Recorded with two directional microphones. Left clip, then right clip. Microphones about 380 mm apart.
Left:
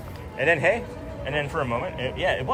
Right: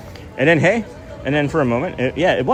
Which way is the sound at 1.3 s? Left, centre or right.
Right.